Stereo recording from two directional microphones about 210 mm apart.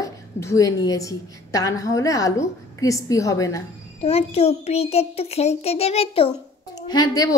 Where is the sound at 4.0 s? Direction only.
30° left (ahead or behind).